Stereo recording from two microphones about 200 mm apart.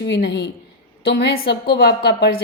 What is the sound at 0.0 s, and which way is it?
Speech, 60° left (ahead or behind).